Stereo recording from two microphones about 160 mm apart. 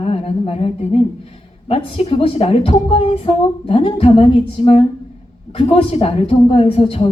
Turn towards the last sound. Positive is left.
turn(degrees=35)  # may be behind; listen again after turning